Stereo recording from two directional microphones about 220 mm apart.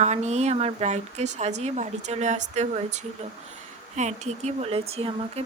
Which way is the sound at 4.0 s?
30° right (ahead or behind).